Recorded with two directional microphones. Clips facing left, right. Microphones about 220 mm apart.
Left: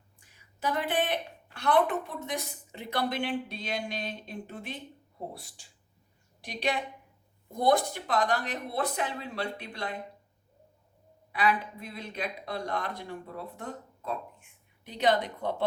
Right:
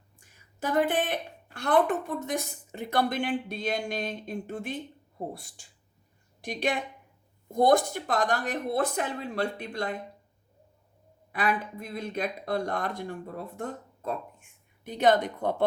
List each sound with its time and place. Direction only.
0.2 s a woman's voice: 50° right (ahead or behind)
11.3 s a woman's voice: 50° right (ahead or behind)